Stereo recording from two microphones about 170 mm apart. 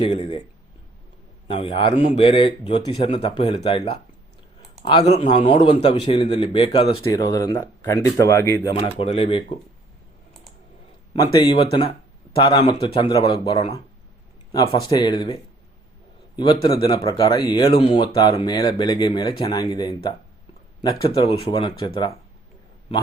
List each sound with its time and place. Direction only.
0.0 s a man's voice: 35° left (ahead or behind)
1.5 s a man's voice: 30° left (ahead or behind)
5.0 s a man's voice: 35° left (ahead or behind)
7.1 s speech: 20° left (ahead or behind)
8.7 s a man's voice: 35° left (ahead or behind)
11.1 s a man's voice: 25° left (ahead or behind)
14.7 s a man's voice: 30° left (ahead or behind)
21.2 s speech: 30° left (ahead or behind)